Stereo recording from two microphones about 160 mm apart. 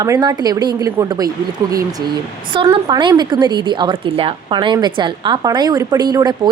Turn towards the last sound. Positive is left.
turn(degrees=-25)  # may be behind; listen again after turning